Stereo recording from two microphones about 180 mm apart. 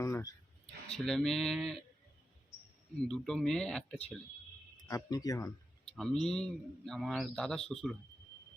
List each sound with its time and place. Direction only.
0.0 s a sound: 15° left (ahead or behind)
0.9 s a man's voice: 5° left (ahead or behind)
3.1 s a man's voice: 5° left (ahead or behind)
4.9 s speech: 20° left (ahead or behind)
6.0 s a man's voice: centre (ahead or behind)